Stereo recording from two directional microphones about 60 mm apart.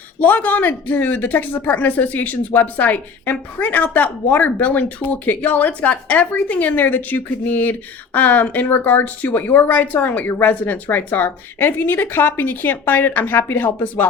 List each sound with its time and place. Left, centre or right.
0.2 s speech: left